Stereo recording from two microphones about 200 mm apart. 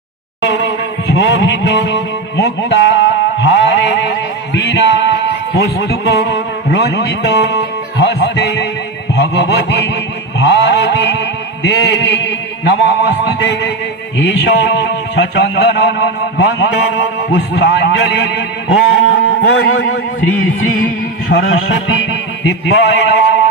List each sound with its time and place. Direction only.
1.0 s music: 60° left (ahead or behind)
5.5 s a man's voice: 60° left (ahead or behind)
10.4 s a sound: 60° left (ahead or behind)
14.2 s speech: 60° left (ahead or behind)
21.2 s a man's voice: 60° left (ahead or behind)